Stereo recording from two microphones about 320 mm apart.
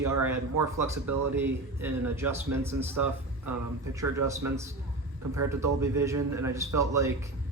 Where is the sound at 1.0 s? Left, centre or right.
Right.